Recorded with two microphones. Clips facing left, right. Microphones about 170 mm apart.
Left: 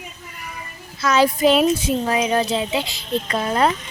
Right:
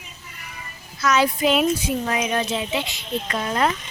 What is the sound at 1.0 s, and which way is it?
Speech, 35° left (ahead or behind).